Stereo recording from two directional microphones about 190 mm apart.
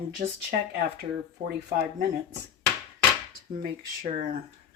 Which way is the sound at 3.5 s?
45° right (ahead or behind).